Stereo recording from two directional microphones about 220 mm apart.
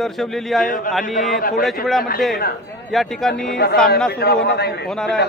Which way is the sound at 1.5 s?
Centre (ahead or behind).